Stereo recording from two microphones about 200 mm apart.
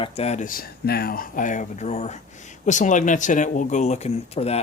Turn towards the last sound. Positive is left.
turn(degrees=30)  # may be behind; listen again after turning